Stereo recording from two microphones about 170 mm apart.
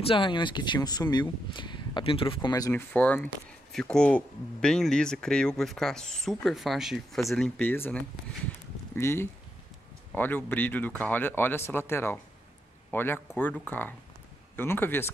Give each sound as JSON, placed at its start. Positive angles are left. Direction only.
{"t": 0.0, "sound": "speech", "side_deg": 30}
{"t": 2.9, "sound": "speech", "side_deg": 10}